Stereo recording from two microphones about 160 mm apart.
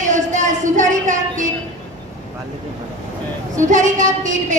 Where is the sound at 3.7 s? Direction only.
50° right (ahead or behind).